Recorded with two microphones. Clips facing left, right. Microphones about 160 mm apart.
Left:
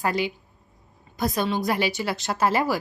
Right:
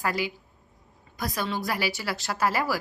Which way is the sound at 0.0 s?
20° left (ahead or behind).